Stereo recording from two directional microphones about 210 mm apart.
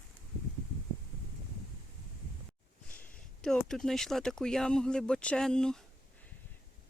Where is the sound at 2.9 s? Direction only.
40° left (ahead or behind).